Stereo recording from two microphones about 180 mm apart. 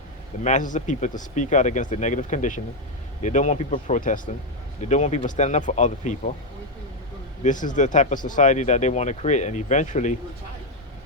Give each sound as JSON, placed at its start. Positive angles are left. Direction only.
{"t": 0.4, "sound": "speech", "side_deg": 45}
{"t": 7.4, "sound": "speech", "side_deg": 45}